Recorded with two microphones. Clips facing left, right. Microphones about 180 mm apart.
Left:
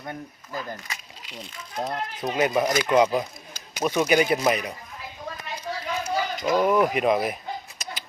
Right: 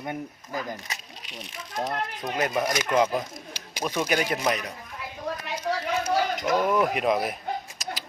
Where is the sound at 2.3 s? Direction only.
5° left (ahead or behind).